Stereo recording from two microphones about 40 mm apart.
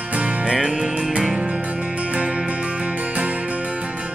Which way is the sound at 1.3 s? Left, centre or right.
Right.